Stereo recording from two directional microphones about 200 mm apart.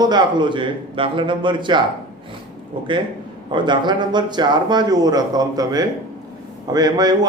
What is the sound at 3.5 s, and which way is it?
Speech, 20° right (ahead or behind).